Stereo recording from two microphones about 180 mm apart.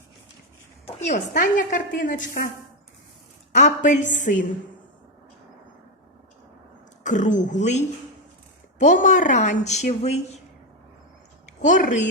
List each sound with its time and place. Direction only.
0.9 s a woman's voice: 40° left (ahead or behind)
3.5 s a woman's voice: 45° left (ahead or behind)
7.0 s a woman's voice: 45° left (ahead or behind)
11.4 s a woman's voice: 45° left (ahead or behind)